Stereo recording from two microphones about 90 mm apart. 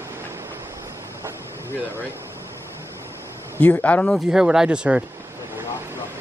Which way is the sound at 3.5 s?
15° left (ahead or behind).